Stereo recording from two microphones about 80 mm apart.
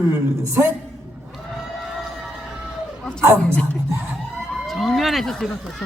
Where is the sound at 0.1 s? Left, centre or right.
Right.